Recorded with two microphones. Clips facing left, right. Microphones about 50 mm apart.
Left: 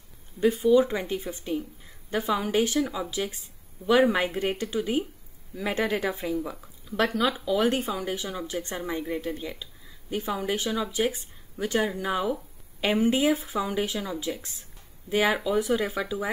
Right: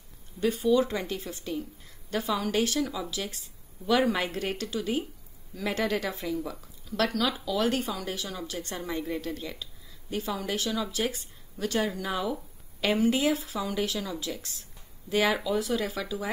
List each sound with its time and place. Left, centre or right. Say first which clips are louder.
0.4 s a woman's voice: left 4 dB; left